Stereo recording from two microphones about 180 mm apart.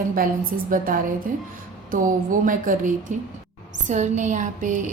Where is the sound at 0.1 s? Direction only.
50° right (ahead or behind).